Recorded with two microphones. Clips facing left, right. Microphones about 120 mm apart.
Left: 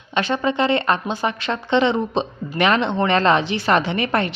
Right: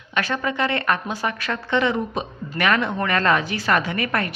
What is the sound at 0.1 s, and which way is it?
Speech, 25° left (ahead or behind).